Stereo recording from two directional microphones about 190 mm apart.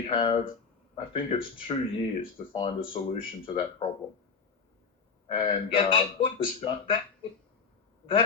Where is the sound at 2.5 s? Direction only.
25° left (ahead or behind).